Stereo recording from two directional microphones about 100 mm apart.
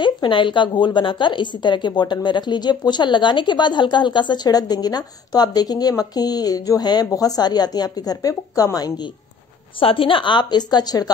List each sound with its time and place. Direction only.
0.0 s a woman's voice: 50° left (ahead or behind)
9.8 s a woman's voice: 65° left (ahead or behind); by 11.1 s 40° left (ahead or behind)